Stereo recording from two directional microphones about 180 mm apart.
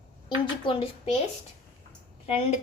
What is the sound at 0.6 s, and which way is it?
Speech, 30° left (ahead or behind).